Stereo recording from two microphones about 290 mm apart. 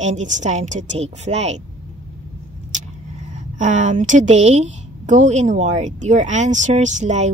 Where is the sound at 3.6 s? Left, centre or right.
Right.